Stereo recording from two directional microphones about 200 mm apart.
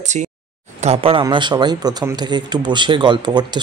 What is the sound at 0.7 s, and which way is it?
A man's voice, 30° right (ahead or behind).